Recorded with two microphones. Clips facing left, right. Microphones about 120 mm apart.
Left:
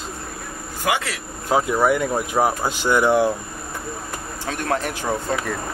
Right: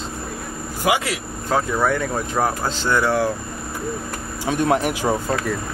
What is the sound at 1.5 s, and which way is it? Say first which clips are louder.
Speech: left 2 dB; 10° left (ahead or behind).